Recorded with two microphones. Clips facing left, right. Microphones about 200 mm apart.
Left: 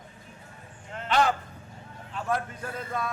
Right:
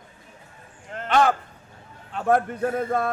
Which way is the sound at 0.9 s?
50° right (ahead or behind).